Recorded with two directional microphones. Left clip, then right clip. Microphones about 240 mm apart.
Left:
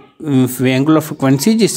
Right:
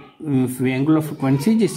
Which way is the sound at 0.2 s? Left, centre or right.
Left.